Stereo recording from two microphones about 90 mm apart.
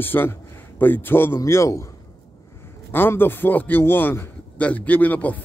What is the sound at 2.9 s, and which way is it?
A man's voice, 25° left (ahead or behind).